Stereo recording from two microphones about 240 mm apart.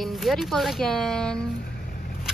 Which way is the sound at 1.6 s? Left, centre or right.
Left.